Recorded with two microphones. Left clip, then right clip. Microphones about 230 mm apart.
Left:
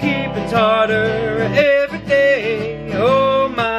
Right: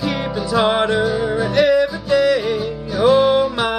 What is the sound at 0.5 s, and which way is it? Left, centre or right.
Music, centre.